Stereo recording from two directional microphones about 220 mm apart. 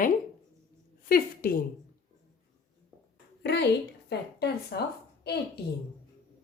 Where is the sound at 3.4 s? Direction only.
50° left (ahead or behind).